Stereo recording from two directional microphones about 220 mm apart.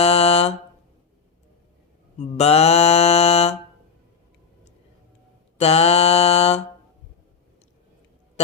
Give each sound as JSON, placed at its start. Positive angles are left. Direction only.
{"t": 0.0, "sound": "mantra", "side_deg": 30}
{"t": 2.1, "sound": "mantra", "side_deg": 30}
{"t": 5.5, "sound": "mantra", "side_deg": 30}